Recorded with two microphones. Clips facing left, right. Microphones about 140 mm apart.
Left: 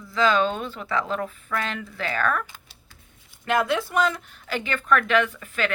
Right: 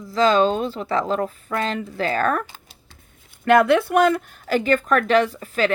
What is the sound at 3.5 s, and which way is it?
Speech, 55° right (ahead or behind).